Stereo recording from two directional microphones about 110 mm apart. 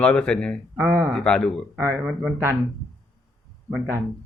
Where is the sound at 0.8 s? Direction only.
25° right (ahead or behind).